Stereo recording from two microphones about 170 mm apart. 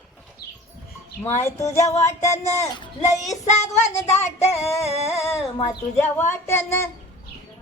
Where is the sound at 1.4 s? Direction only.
15° left (ahead or behind).